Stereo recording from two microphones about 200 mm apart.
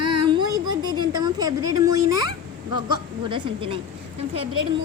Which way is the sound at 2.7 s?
25° right (ahead or behind).